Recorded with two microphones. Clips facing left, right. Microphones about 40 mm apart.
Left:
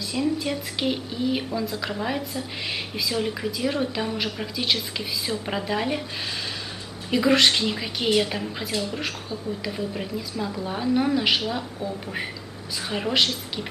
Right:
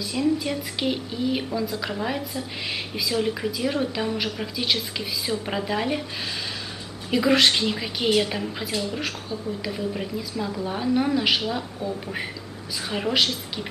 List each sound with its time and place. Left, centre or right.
0.0 s a woman's voice: centre
7.1 s a woman's voice: centre